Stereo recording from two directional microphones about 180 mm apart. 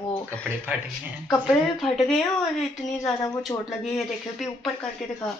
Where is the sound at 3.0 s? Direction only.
15° left (ahead or behind).